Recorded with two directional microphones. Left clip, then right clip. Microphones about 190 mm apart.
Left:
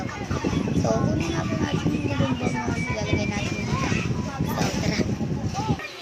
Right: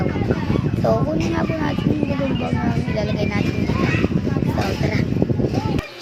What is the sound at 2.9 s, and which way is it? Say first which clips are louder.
Speech: right 4 dB; 15° right (ahead or behind).